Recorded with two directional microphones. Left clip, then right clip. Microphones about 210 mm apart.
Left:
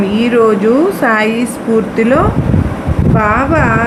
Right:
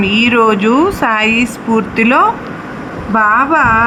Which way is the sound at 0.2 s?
30° right (ahead or behind).